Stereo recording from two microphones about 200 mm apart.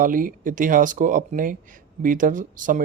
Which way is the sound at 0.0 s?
45° right (ahead or behind).